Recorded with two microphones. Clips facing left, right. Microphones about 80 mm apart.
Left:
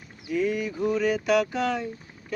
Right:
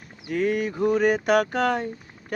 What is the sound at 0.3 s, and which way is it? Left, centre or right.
Speech, right.